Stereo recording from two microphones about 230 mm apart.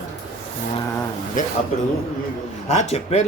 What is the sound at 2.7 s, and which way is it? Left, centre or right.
Speech, left.